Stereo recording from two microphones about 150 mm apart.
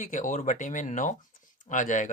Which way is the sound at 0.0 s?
60° left (ahead or behind).